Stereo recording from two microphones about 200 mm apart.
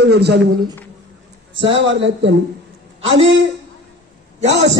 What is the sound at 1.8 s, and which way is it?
Speech, 65° right (ahead or behind).